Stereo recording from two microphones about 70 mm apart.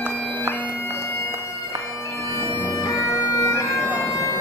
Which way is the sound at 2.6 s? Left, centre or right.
Left.